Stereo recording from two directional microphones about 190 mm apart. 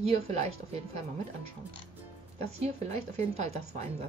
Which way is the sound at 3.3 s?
35° right (ahead or behind).